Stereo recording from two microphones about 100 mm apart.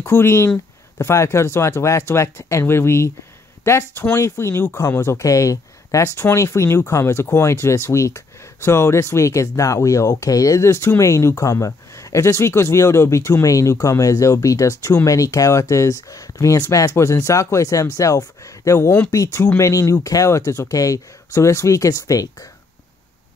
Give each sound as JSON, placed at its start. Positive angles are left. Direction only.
{"t": 0.0, "sound": "speech", "side_deg": 25}